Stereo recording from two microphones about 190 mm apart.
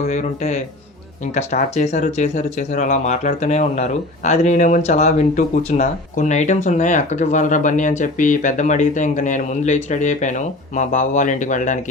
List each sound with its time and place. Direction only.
0.1 s speech: 40° left (ahead or behind)